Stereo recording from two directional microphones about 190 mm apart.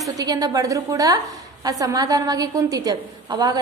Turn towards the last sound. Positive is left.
turn(degrees=-20)  # may be behind; listen again after turning